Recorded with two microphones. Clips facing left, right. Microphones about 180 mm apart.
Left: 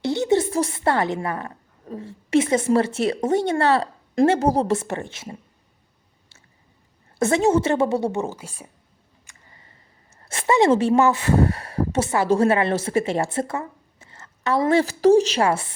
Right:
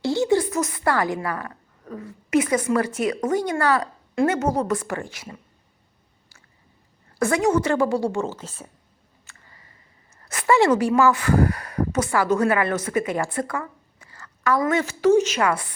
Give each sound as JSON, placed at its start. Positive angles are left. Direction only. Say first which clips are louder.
{"t": 0.0, "sound": "a woman's voice", "louder": "even", "side_deg": 20}
{"t": 7.2, "sound": "a woman's voice", "louder": "left 2 dB", "side_deg": 25}
{"t": 9.2, "sound": "a sound", "louder": "right 1 dB", "side_deg": 25}
{"t": 10.2, "sound": "a woman's voice", "louder": "left 1 dB", "side_deg": 25}